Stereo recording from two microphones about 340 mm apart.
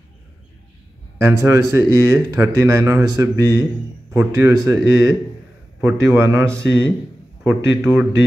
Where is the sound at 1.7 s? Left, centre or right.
Centre.